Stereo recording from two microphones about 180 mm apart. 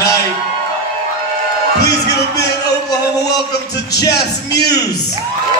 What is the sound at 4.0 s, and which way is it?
Speech, 20° left (ahead or behind).